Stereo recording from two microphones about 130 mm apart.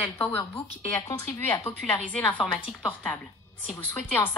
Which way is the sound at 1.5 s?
15° left (ahead or behind).